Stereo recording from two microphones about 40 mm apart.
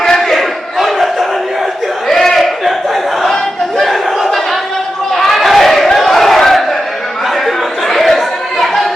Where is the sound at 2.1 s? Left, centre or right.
Centre.